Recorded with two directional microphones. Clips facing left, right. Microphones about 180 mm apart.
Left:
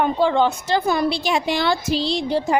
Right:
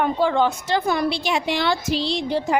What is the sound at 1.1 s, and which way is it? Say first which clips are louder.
A woman's voice: left 2 dB; 40° left (ahead or behind).